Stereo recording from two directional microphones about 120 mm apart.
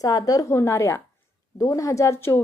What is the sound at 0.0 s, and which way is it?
A woman's voice, 30° left (ahead or behind).